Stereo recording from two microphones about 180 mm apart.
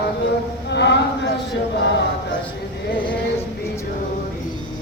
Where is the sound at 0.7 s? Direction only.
75° left (ahead or behind).